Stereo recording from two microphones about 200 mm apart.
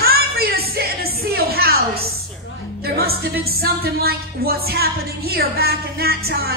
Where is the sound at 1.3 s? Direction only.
50° right (ahead or behind).